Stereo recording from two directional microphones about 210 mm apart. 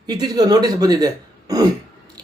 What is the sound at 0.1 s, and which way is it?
Speech, 20° right (ahead or behind).